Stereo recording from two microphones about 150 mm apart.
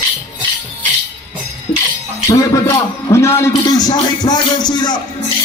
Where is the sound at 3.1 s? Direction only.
20° left (ahead or behind).